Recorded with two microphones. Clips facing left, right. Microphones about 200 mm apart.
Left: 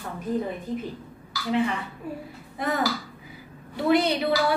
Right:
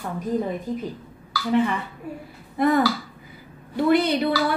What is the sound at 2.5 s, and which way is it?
Speech, 55° right (ahead or behind).